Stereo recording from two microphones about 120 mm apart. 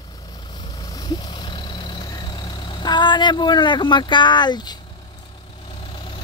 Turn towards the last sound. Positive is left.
turn(degrees=45)  # may be behind; listen again after turning